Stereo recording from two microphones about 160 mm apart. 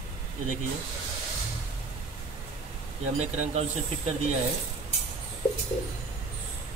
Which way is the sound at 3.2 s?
40° right (ahead or behind).